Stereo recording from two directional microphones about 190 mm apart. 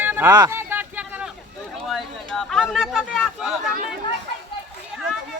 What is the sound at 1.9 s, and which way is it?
Speech, centre (ahead or behind).